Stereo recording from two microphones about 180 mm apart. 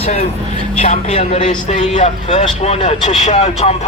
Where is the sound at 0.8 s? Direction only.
40° left (ahead or behind).